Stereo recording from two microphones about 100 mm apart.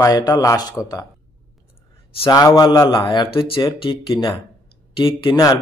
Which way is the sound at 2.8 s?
50° left (ahead or behind).